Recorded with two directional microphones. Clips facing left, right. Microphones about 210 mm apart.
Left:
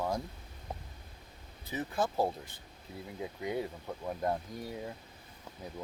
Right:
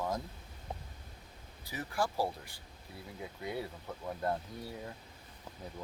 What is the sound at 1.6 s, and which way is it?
Speech, 20° left (ahead or behind).